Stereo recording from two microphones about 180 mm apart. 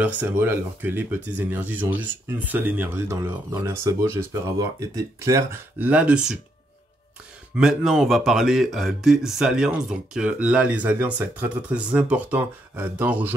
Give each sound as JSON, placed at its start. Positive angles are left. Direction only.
{"t": 0.0, "sound": "speech", "side_deg": -10}
{"t": 7.5, "sound": "speech", "side_deg": -5}